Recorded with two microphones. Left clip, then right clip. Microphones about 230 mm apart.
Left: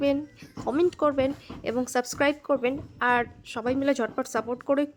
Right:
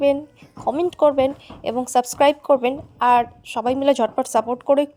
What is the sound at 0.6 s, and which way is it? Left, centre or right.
Speech, centre.